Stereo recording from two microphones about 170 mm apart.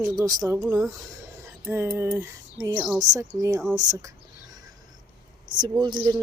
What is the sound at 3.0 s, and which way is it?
Speech, 20° right (ahead or behind).